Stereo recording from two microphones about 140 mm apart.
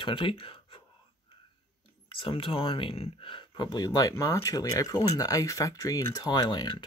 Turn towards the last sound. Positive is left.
turn(degrees=30)  # may be behind; listen again after turning